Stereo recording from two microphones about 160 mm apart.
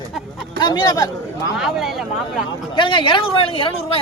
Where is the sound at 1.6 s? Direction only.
Centre (ahead or behind).